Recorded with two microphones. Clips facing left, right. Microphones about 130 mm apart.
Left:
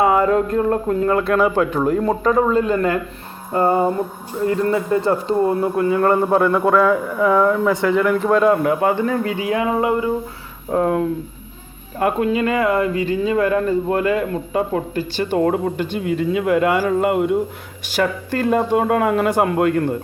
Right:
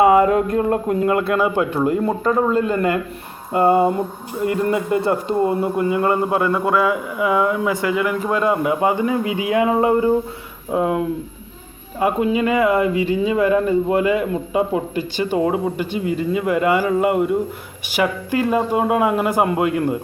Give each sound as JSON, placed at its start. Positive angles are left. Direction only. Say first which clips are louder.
{"t": 0.0, "sound": "a sound", "louder": "right 2 dB", "side_deg": -20}
{"t": 0.5, "sound": "a man's voice", "louder": "even", "side_deg": -20}
{"t": 10.7, "sound": "a man's voice", "louder": "left 1 dB", "side_deg": -5}
{"t": 16.0, "sound": "speech", "louder": "even", "side_deg": 60}
{"t": 16.3, "sound": "a man's voice", "louder": "left 1 dB", "side_deg": 0}
{"t": 17.9, "sound": "a man's voice", "louder": "right 1 dB", "side_deg": -10}